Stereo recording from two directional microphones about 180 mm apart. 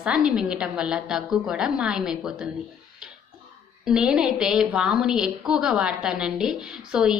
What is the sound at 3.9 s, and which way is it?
A woman's voice, 5° right (ahead or behind).